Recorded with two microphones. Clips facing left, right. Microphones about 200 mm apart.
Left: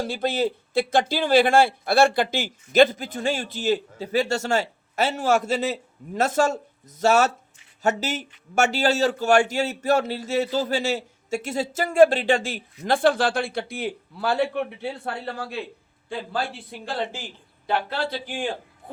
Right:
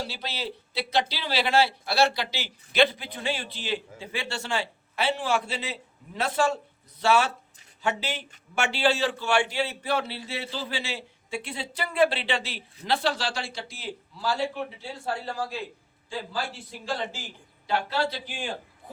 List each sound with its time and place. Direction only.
0.0 s a man's voice: 50° left (ahead or behind)